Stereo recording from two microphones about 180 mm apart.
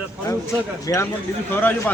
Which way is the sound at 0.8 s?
20° left (ahead or behind).